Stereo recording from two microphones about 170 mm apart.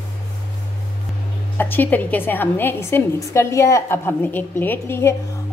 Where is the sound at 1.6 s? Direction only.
10° left (ahead or behind).